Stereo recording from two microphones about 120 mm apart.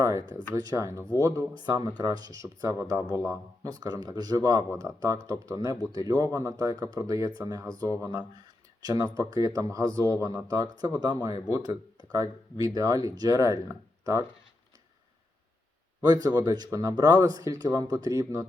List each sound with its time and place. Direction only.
0.0 s speech: 25° right (ahead or behind)
16.0 s speech: 35° right (ahead or behind)